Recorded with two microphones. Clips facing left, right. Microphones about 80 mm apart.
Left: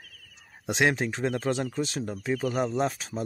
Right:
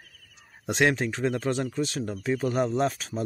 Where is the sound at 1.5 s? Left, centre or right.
Centre.